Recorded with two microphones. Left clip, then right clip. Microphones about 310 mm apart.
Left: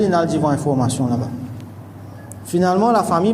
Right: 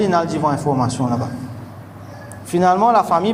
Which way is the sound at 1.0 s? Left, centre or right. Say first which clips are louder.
Right 1 dB; centre.